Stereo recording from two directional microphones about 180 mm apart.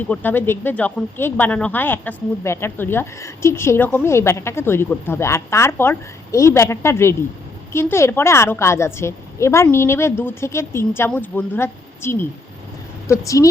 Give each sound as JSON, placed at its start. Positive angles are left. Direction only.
{"t": 0.1, "sound": "speech", "side_deg": 10}